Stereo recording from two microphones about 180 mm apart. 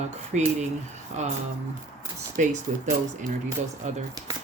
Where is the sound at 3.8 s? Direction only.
40° right (ahead or behind).